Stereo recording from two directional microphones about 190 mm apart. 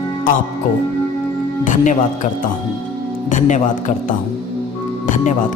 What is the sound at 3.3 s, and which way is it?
Speech, 40° left (ahead or behind).